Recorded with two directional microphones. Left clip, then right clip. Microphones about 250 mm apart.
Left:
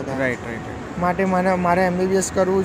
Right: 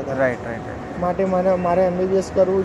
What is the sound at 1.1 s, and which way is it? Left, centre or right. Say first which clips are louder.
Speech: right 1 dB; left.